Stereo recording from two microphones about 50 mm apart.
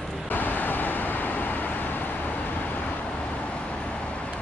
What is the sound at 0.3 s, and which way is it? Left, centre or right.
Vehicle, left.